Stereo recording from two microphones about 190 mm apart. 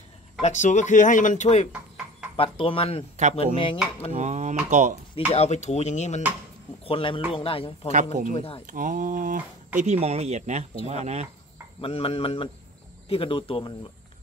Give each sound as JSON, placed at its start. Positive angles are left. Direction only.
{"t": 0.4, "sound": "speech", "side_deg": 40}
{"t": 4.1, "sound": "speech", "side_deg": -35}
{"t": 5.3, "sound": "speech", "side_deg": 35}
{"t": 7.9, "sound": "speech", "side_deg": -40}
{"t": 8.3, "sound": "speech", "side_deg": 30}
{"t": 8.6, "sound": "speech", "side_deg": -45}
{"t": 9.8, "sound": "speech", "side_deg": -35}
{"t": 11.8, "sound": "speech", "side_deg": 30}